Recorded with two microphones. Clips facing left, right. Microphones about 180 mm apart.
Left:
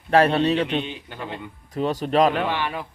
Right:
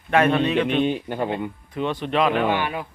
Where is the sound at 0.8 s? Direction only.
50° right (ahead or behind).